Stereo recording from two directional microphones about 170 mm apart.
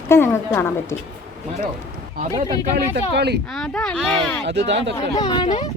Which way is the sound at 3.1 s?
80° right.